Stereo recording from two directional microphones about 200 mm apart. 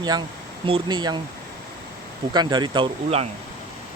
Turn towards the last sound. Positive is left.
turn(degrees=-25)  # may be behind; listen again after turning